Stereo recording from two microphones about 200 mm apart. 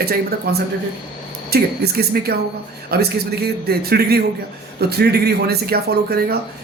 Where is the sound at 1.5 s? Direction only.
50° right (ahead or behind).